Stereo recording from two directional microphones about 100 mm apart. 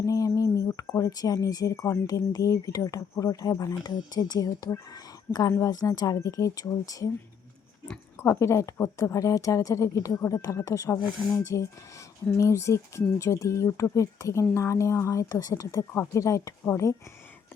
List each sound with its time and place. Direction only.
0.0 s speech: 35° left (ahead or behind)
5.5 s a woman's voice: 30° left (ahead or behind)
8.1 s speech: 25° left (ahead or behind)